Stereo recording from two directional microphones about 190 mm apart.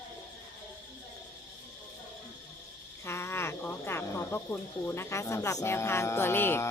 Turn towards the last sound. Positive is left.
turn(degrees=10)  # may be behind; listen again after turning